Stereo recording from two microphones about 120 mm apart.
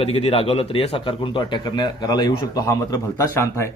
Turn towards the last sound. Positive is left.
turn(degrees=20)  # may be behind; listen again after turning